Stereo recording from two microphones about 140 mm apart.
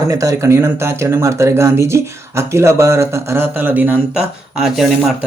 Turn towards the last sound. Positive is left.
turn(degrees=-5)  # may be behind; listen again after turning